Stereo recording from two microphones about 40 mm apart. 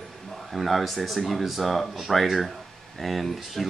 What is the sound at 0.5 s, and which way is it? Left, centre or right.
Speech, centre.